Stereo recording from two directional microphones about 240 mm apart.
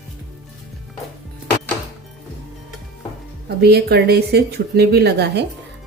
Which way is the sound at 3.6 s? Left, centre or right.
Right.